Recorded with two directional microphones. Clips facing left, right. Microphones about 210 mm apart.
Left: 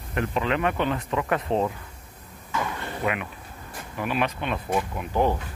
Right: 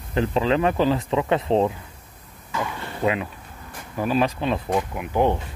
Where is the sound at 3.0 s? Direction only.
30° right (ahead or behind).